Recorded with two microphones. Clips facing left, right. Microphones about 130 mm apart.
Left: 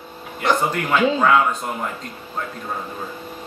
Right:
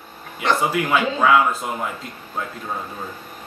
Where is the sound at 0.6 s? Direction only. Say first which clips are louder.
Right 1 dB; 5° right (ahead or behind).